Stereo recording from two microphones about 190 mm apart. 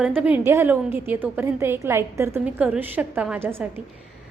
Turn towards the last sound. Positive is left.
turn(degrees=-10)  # may be behind; listen again after turning